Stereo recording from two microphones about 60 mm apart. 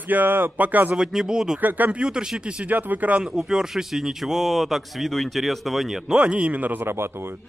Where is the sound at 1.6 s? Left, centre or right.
Right.